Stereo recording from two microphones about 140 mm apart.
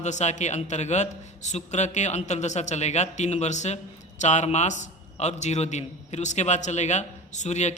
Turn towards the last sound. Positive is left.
turn(degrees=55)  # may be behind; listen again after turning